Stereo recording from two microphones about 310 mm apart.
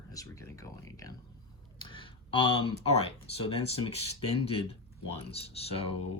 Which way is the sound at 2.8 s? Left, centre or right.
Centre.